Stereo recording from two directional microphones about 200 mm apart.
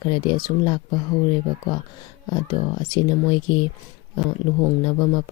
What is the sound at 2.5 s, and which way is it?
Speech, 20° left (ahead or behind).